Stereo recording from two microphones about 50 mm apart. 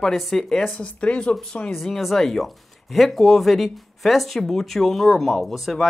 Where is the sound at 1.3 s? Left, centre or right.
Centre.